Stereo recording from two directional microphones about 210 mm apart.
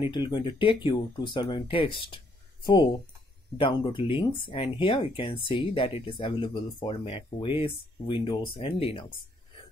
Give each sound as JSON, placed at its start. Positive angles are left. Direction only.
{"t": 0.0, "sound": "speech", "side_deg": 20}